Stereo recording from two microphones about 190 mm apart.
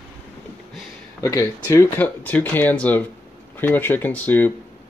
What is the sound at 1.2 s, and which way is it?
Speech, 15° left (ahead or behind).